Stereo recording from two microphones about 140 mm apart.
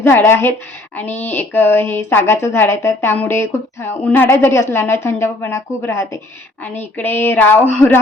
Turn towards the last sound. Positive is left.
turn(degrees=15)  # may be behind; listen again after turning